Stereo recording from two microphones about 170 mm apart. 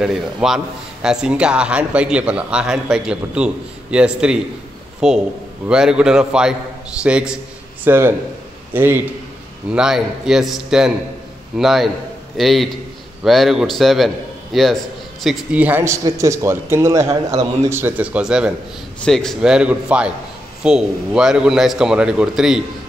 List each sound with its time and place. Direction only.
0.0 s a man's voice: 5° right (ahead or behind)